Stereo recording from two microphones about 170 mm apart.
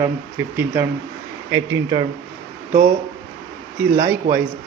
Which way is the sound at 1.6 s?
25° right (ahead or behind).